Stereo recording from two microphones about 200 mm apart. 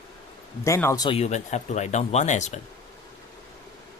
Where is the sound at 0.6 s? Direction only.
15° left (ahead or behind); by 2.6 s 35° left (ahead or behind).